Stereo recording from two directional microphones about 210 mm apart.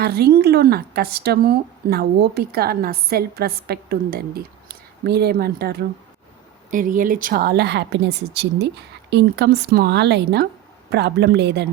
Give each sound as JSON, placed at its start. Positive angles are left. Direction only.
{"t": 0.0, "sound": "a woman's voice", "side_deg": -50}